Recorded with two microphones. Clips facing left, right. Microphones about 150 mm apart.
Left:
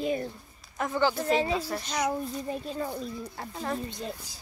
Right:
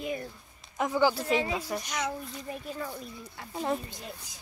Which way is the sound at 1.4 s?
30° left (ahead or behind).